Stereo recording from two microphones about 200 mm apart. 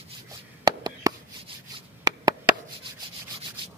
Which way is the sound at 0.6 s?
20° right (ahead or behind).